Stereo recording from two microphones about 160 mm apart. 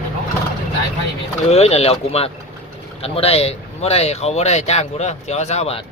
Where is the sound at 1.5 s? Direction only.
40° left (ahead or behind).